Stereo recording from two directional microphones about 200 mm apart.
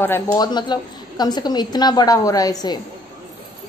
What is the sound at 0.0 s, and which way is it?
A woman's voice, 10° left (ahead or behind).